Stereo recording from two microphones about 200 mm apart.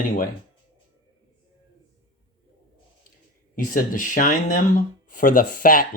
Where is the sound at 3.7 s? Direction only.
40° left (ahead or behind).